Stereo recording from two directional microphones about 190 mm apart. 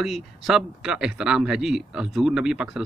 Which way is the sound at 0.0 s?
Centre (ahead or behind).